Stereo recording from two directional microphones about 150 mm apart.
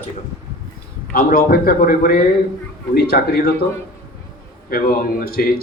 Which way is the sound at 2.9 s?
90° left.